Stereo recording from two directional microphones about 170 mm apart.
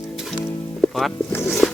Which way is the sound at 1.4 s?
Centre (ahead or behind).